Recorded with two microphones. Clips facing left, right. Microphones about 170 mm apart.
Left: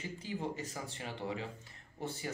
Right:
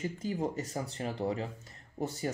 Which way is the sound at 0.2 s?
40° right (ahead or behind).